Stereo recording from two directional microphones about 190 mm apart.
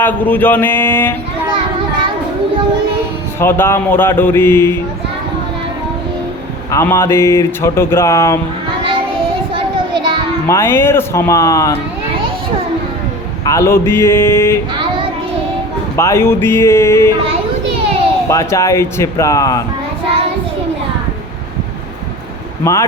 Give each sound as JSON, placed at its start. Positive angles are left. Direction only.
{"t": 0.0, "sound": "a sound", "side_deg": 10}
{"t": 3.4, "sound": "speech", "side_deg": 10}
{"t": 6.7, "sound": "speech", "side_deg": 15}
{"t": 10.4, "sound": "speech", "side_deg": 15}
{"t": 13.4, "sound": "speech", "side_deg": 15}
{"t": 16.0, "sound": "speech", "side_deg": 15}
{"t": 18.3, "sound": "speech", "side_deg": 15}
{"t": 22.6, "sound": "speech", "side_deg": 15}